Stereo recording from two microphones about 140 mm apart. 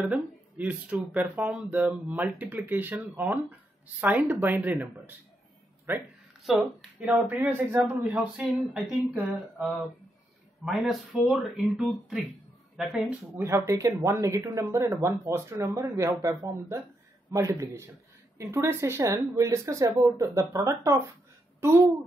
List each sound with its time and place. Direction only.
0.0 s speech: 10° right (ahead or behind)
6.5 s speech: 5° right (ahead or behind)
7.2 s speech: 15° right (ahead or behind)
10.6 s a woman's voice: centre (ahead or behind)
13.0 s speech: 20° right (ahead or behind)